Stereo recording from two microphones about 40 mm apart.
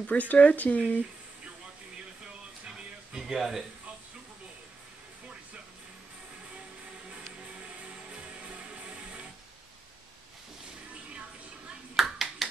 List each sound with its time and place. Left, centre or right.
0.0 s speech: left
3.1 s speech: centre
8.1 s music: right
12.0 s clapping: centre